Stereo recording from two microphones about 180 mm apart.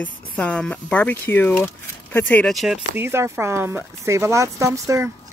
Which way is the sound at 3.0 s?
15° right (ahead or behind).